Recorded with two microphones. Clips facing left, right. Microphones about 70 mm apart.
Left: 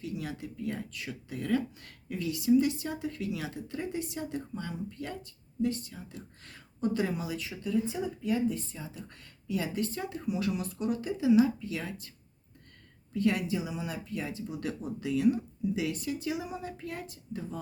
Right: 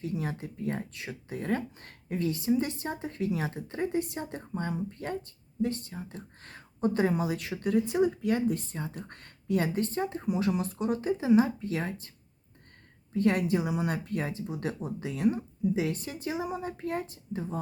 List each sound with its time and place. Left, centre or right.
0.0 s speech: right
7.3 s speech: right
13.1 s speech: right